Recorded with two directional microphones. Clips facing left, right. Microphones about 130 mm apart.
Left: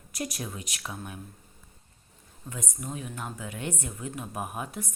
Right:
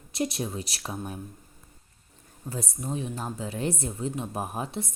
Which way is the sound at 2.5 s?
35° right (ahead or behind).